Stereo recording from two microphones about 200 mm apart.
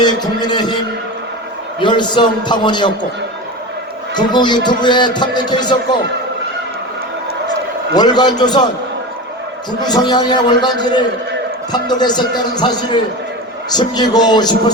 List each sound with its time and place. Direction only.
0.0 s music: 20° left (ahead or behind)
1.8 s a man's voice: 25° left (ahead or behind)
4.1 s a man's voice: 20° left (ahead or behind)
7.9 s a man's voice: 20° left (ahead or behind)
9.8 s a man's voice: 20° left (ahead or behind)